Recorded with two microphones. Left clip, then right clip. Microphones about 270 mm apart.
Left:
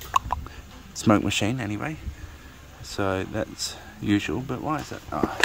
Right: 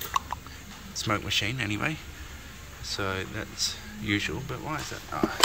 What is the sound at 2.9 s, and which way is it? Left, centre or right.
Speech, left.